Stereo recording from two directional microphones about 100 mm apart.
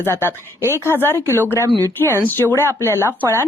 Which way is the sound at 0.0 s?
25° left (ahead or behind).